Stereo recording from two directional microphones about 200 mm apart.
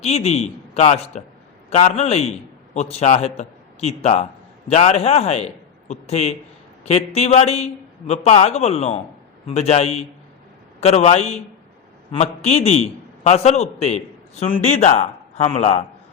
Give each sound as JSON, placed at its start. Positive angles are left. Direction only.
{"t": 0.0, "sound": "a man's voice", "side_deg": 30}